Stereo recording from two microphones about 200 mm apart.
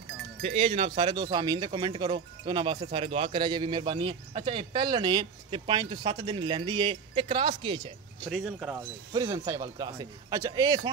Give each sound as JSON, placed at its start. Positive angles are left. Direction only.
{"t": 0.4, "sound": "speech", "side_deg": -30}
{"t": 8.3, "sound": "speech", "side_deg": -5}
{"t": 9.1, "sound": "speech", "side_deg": -15}